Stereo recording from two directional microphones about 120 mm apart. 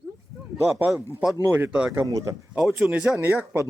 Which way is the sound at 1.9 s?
25° right (ahead or behind).